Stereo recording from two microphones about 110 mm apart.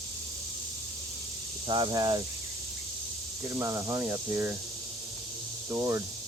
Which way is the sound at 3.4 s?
25° right (ahead or behind).